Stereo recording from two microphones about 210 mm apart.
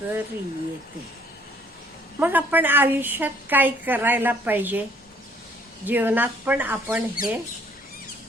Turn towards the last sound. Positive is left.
turn(degrees=45)  # may be behind; listen again after turning